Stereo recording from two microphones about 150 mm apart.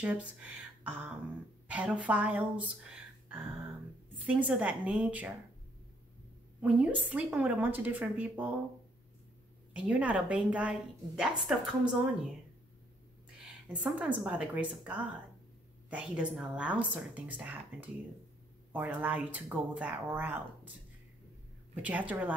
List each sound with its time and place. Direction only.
0.0 s a woman's voice: 10° right (ahead or behind)
6.6 s a woman's voice: 10° right (ahead or behind)
9.8 s a woman's voice: 10° right (ahead or behind)
13.7 s a woman's voice: 10° right (ahead or behind)
21.8 s a woman's voice: 10° right (ahead or behind)